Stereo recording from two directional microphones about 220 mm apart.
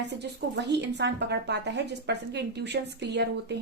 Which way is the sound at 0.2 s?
50° right (ahead or behind).